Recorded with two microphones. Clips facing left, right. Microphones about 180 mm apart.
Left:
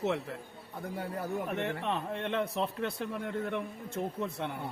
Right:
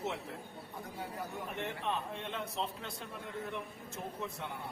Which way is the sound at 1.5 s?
70° left (ahead or behind).